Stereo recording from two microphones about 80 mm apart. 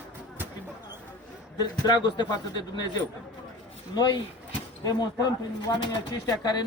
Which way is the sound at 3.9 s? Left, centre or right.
Left.